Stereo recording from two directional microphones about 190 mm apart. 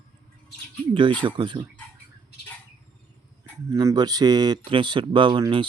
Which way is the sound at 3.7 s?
20° right (ahead or behind).